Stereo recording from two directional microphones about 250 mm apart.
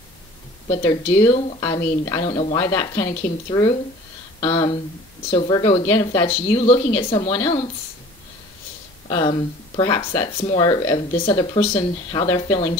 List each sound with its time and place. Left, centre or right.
0.7 s speech: left
9.1 s speech: centre